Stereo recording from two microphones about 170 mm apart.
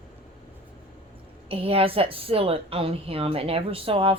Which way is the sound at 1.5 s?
35° right (ahead or behind).